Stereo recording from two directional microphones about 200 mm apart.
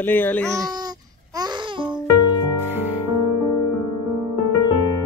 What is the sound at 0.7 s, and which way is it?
Babbling, 20° right (ahead or behind).